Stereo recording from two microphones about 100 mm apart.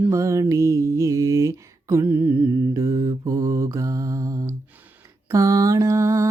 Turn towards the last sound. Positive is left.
turn(degrees=-30)  # may be behind; listen again after turning